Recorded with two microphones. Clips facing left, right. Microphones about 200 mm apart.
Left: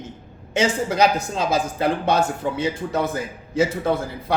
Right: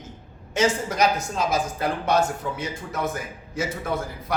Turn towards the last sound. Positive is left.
turn(degrees=30)  # may be behind; listen again after turning